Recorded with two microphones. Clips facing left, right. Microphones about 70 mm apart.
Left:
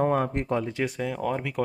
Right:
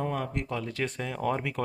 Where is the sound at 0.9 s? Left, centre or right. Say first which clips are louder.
Left 2 dB; centre.